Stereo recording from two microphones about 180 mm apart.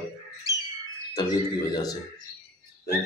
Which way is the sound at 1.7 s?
20° left (ahead or behind).